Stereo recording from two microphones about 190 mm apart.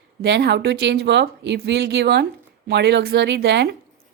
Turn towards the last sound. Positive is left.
turn(degrees=-65)  # may be behind; listen again after turning